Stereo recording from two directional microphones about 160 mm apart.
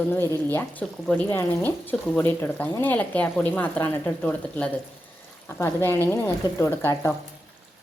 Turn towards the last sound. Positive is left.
turn(degrees=15)  # may be behind; listen again after turning